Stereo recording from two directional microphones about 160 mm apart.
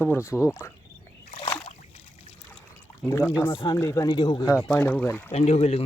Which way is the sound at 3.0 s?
Centre (ahead or behind).